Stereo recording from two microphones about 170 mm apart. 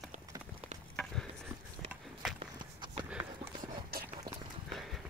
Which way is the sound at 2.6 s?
25° right (ahead or behind).